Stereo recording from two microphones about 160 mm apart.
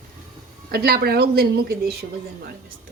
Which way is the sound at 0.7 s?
80° right.